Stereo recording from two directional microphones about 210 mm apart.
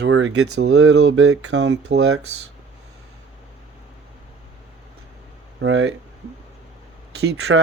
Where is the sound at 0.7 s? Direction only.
90° right.